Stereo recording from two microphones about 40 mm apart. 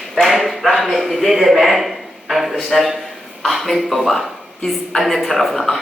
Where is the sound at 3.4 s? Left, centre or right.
Centre.